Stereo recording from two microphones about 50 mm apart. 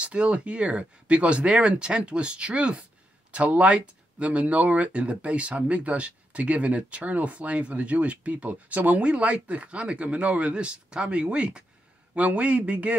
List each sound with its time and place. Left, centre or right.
0.0 s speech: right